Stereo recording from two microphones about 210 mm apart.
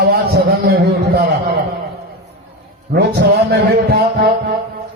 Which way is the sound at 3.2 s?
55° right (ahead or behind).